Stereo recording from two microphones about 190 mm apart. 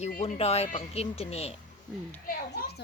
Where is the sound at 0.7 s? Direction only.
30° left (ahead or behind).